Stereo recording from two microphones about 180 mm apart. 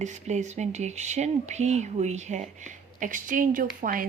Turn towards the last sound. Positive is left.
turn(degrees=-50)  # may be behind; listen again after turning